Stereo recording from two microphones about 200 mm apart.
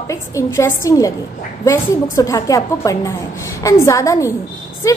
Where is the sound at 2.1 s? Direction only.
15° left (ahead or behind).